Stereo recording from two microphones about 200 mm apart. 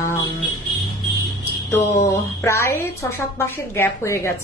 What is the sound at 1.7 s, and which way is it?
A woman's voice, 15° left (ahead or behind).